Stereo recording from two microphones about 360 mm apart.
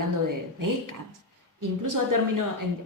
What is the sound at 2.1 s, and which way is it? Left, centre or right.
Speech, right.